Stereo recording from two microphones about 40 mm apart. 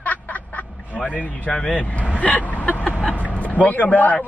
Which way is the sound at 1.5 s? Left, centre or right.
Centre.